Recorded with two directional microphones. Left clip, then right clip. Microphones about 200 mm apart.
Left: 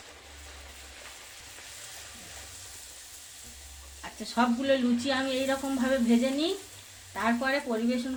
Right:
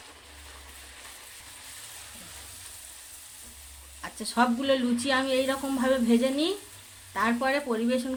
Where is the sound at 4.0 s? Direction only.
25° right (ahead or behind).